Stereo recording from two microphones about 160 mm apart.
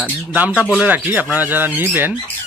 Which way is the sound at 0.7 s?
10° right (ahead or behind).